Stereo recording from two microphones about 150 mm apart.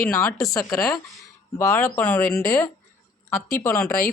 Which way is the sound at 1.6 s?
15° left (ahead or behind).